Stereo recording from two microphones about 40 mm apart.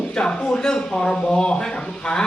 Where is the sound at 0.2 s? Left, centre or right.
Left.